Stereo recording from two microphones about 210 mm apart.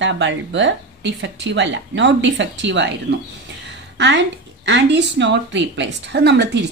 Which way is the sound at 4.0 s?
55° right (ahead or behind).